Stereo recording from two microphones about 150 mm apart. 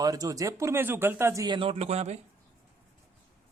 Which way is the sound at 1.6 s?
40° right (ahead or behind).